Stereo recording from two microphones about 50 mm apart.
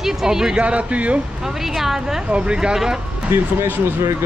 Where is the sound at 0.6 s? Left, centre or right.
Right.